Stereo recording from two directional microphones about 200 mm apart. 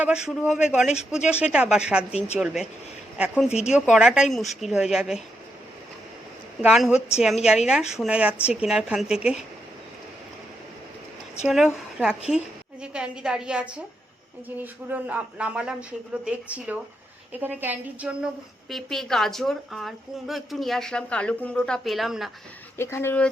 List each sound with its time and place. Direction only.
0.0 s speech: 5° right (ahead or behind)
2.1 s a woman's voice: 30° left (ahead or behind)
2.4 s speech: 5° right (ahead or behind)
6.6 s speech: 5° right (ahead or behind)
11.4 s a woman's voice: centre (ahead or behind)
22.8 s speech: 10° left (ahead or behind)